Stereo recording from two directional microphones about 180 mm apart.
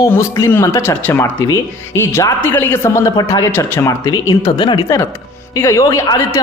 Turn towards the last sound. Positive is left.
turn(degrees=15)  # may be behind; listen again after turning